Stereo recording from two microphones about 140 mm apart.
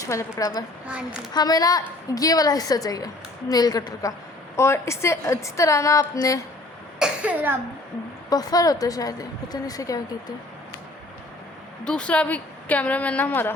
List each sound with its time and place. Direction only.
0.0 s a woman's voice: 20° left (ahead or behind)
0.9 s a child's voice: 5° right (ahead or behind)
1.3 s a woman's voice: 30° left (ahead or behind)
7.0 s cough: 10° right (ahead or behind)
8.3 s a woman's voice: 25° left (ahead or behind)
11.9 s a woman's voice: 10° left (ahead or behind)